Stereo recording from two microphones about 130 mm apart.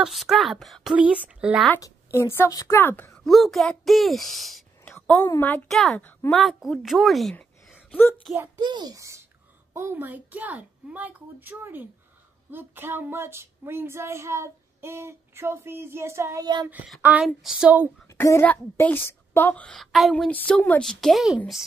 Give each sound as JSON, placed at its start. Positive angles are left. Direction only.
{"t": 0.0, "sound": "a woman's voice", "side_deg": 0}
{"t": 0.9, "sound": "a woman's voice", "side_deg": -10}
{"t": 2.1, "sound": "speech", "side_deg": 20}
{"t": 3.3, "sound": "a woman's voice", "side_deg": 0}
{"t": 4.8, "sound": "a woman's voice", "side_deg": 15}
{"t": 5.7, "sound": "a woman's voice", "side_deg": 5}
{"t": 6.3, "sound": "a woman's voice", "side_deg": 0}
{"t": 7.9, "sound": "speech", "side_deg": 15}
{"t": 8.5, "sound": "a child's voice", "side_deg": -35}
{"t": 12.4, "sound": "a sound", "side_deg": -15}
{"t": 16.6, "sound": "a woman's voice", "side_deg": -10}
{"t": 18.0, "sound": "a child's voice", "side_deg": 20}